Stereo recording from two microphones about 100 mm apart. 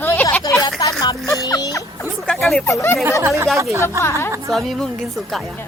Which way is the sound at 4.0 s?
30° left (ahead or behind).